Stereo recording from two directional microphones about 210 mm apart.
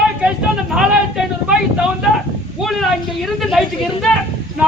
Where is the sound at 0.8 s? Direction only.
5° right (ahead or behind).